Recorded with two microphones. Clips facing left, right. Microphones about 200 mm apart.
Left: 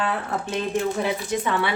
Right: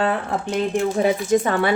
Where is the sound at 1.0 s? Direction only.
45° right (ahead or behind).